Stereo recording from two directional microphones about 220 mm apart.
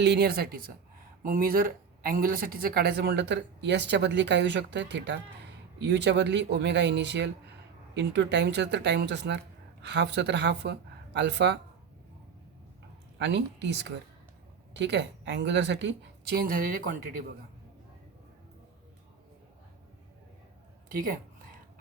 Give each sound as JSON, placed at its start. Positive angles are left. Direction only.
{"t": 0.0, "sound": "speech", "side_deg": -50}
{"t": 13.1, "sound": "speech", "side_deg": -50}